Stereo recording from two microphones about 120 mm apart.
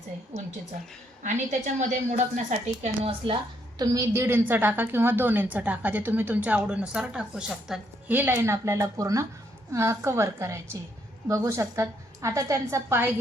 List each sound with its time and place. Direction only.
1.2 s a woman's voice: 90° right; by 3.8 s 45° right (ahead or behind)
3.9 s a woman's voice: 20° right (ahead or behind)